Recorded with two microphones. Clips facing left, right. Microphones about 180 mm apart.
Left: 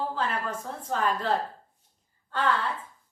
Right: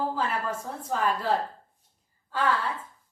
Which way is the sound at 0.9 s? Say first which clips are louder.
Even; 5° right (ahead or behind).